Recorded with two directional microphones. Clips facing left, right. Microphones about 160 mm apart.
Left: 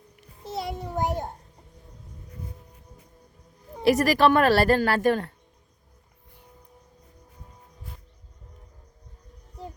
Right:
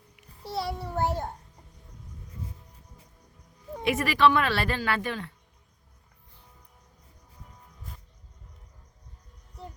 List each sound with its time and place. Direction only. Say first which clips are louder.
0.4 s child singing: even; 20° left (ahead or behind)
3.8 s speech: left 4 dB; 40° left (ahead or behind)